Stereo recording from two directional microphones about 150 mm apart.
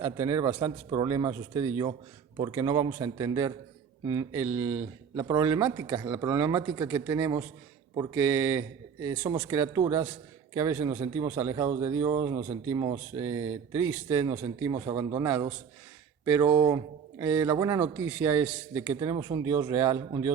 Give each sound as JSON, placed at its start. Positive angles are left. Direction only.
{"t": 0.0, "sound": "speech", "side_deg": -20}
{"t": 4.4, "sound": "a man's voice", "side_deg": -10}
{"t": 18.9, "sound": "speech", "side_deg": -30}